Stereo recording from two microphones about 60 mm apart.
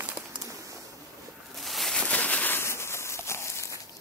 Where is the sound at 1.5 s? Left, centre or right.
Centre.